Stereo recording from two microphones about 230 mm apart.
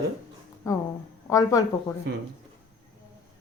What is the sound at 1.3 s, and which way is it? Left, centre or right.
Speech, centre.